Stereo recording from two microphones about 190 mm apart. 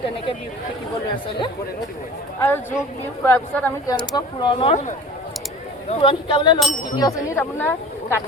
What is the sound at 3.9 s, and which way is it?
Speech, 25° left (ahead or behind).